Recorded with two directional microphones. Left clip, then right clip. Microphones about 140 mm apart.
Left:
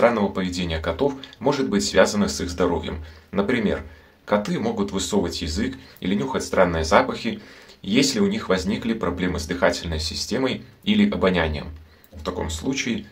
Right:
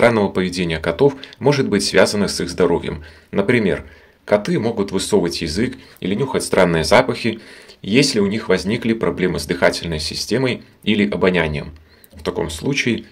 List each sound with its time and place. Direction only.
0.1 s speech: 45° right (ahead or behind)
5.9 s speech: 20° right (ahead or behind)
6.3 s speech: 50° right (ahead or behind)
7.8 s speech: 30° right (ahead or behind)